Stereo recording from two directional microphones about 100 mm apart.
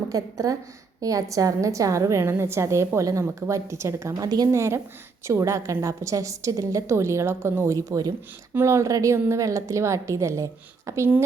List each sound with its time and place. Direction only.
0.1 s a woman's voice: 35° right (ahead or behind)
7.9 s a woman's voice: 35° right (ahead or behind)